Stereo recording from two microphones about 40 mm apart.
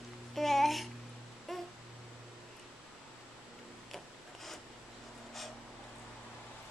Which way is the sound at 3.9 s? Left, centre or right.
Centre.